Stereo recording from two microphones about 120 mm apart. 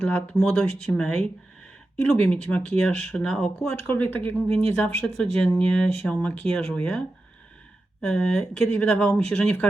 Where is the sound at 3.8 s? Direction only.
15° left (ahead or behind).